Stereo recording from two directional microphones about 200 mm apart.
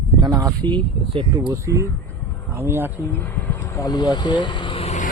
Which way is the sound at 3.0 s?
10° left (ahead or behind).